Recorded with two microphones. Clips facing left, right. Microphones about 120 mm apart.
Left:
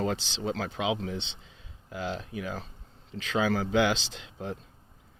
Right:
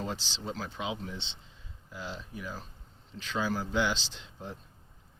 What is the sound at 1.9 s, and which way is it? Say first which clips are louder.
Speech: left 7 dB; 70° left (ahead or behind).